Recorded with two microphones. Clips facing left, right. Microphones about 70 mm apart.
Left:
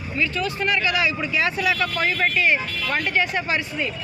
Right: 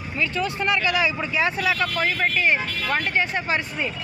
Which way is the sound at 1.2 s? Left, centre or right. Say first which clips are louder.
Even; right.